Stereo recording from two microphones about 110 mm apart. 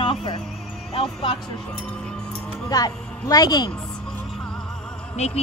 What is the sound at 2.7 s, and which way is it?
A woman's voice, 35° left (ahead or behind).